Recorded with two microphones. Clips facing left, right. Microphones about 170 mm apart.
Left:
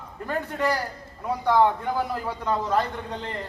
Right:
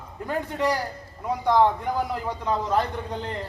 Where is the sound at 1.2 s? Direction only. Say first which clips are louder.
Even; 15° right (ahead or behind).